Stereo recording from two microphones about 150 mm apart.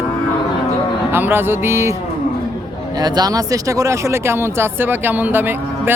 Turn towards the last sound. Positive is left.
turn(degrees=-15)  # may be behind; listen again after turning